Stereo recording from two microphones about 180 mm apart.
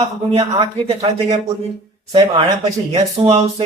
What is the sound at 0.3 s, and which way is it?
Speech, 35° right (ahead or behind).